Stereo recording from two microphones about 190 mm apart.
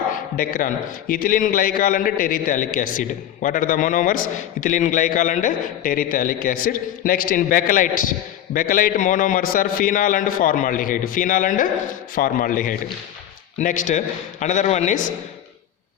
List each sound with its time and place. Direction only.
0.3 s a man's voice: 50° left (ahead or behind)